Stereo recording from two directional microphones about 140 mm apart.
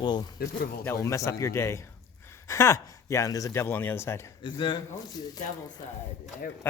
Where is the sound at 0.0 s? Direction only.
35° left (ahead or behind).